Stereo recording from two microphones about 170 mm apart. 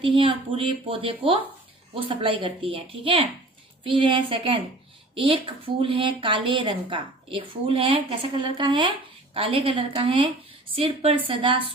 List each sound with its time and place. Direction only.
0.0 s a woman's voice: 30° right (ahead or behind)